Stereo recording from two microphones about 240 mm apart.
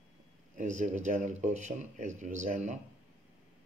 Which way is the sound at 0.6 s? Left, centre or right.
Right.